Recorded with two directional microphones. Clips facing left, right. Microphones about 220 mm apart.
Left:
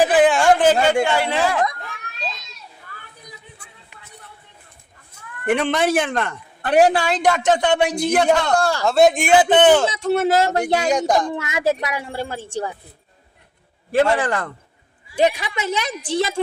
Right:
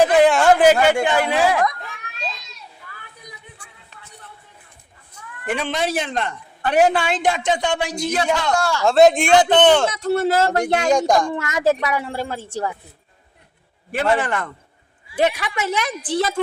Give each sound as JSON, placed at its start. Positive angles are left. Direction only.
{"t": 0.0, "sound": "a sound", "side_deg": 0}
{"t": 1.0, "sound": "speech", "side_deg": -15}
{"t": 1.8, "sound": "a sound", "side_deg": 0}
{"t": 5.5, "sound": "a woman's voice", "side_deg": 60}
{"t": 7.4, "sound": "a man's voice", "side_deg": 60}
{"t": 8.8, "sound": "speech", "side_deg": 0}
{"t": 10.1, "sound": "speech", "side_deg": 15}
{"t": 14.3, "sound": "a man's voice", "side_deg": 35}
{"t": 15.2, "sound": "a woman's voice", "side_deg": 20}